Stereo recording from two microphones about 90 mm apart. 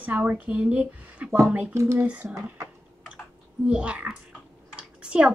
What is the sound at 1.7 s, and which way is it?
Speech, 35° right (ahead or behind).